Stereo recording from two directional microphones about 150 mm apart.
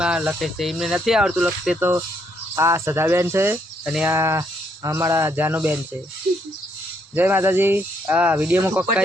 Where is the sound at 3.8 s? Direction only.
5° right (ahead or behind).